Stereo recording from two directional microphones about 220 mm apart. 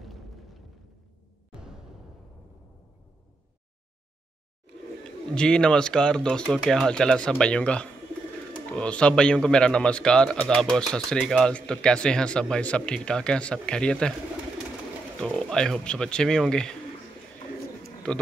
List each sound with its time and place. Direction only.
0.0 s a sound: centre (ahead or behind)
5.3 s speech: 5° left (ahead or behind)
15.2 s speech: centre (ahead or behind)